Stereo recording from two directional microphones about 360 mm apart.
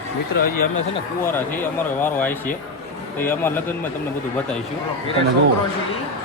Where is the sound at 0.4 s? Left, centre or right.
Left.